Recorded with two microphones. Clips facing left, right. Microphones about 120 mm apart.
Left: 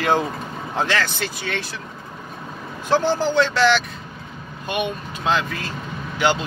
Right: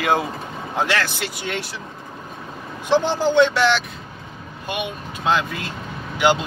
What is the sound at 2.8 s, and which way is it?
Speech, 15° right (ahead or behind).